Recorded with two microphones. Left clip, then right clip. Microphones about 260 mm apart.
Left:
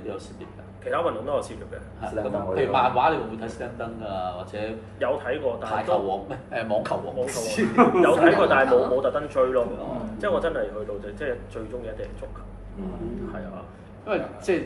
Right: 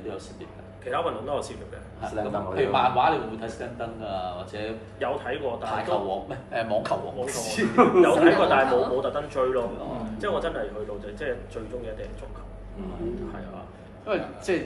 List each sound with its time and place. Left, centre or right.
0.8 s a man's voice: centre
14.0 s a man's voice: centre